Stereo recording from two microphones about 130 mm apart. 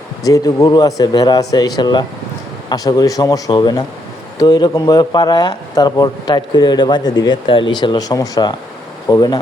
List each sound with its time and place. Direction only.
0.3 s speech: 25° left (ahead or behind)